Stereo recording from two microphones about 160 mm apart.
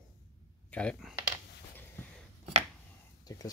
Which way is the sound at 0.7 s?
5° left (ahead or behind).